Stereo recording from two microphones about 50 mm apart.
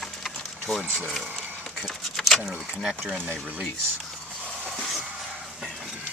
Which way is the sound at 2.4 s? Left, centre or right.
Right.